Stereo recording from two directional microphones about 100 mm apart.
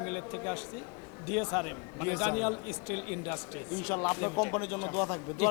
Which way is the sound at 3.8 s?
20° left (ahead or behind).